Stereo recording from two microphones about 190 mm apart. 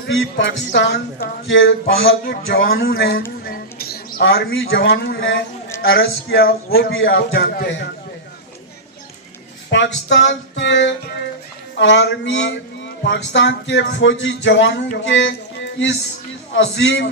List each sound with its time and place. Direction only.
0.1 s speech: 75° left (ahead or behind)
2.8 s speech: 55° left (ahead or behind)
3.4 s a sound: 50° left (ahead or behind)
4.3 s speech: 55° left (ahead or behind); by 5.4 s 75° left (ahead or behind)
6.0 s speech: 60° left (ahead or behind)
9.7 s speech: 70° left (ahead or behind)
14.9 s a sound: 70° left (ahead or behind)
16.5 s speech: 70° left (ahead or behind)